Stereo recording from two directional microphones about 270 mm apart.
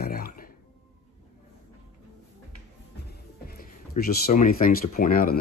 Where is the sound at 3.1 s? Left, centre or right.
Left.